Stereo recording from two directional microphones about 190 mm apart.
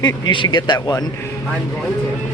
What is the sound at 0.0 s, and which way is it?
A man's voice, 25° left (ahead or behind).